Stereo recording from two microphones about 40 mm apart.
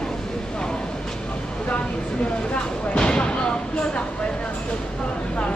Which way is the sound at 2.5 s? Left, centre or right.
Left.